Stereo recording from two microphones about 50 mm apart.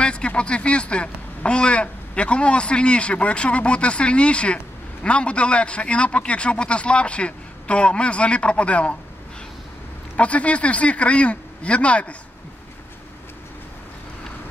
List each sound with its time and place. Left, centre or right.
0.0 s a sound: left
0.4 s a man's voice: left
10.1 s a man's voice: left